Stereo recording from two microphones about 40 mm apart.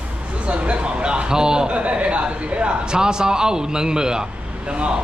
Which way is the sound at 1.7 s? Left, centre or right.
Right.